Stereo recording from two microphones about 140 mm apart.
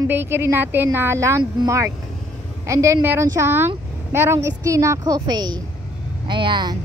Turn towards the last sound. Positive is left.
turn(degrees=-30)  # may be behind; listen again after turning